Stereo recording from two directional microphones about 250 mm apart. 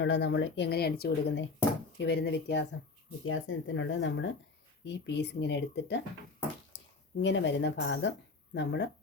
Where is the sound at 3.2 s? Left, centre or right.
Left.